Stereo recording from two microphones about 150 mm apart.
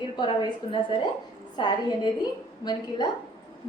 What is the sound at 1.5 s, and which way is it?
A woman's voice, 30° left (ahead or behind).